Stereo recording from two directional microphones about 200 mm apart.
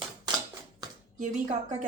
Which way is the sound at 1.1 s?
35° right (ahead or behind).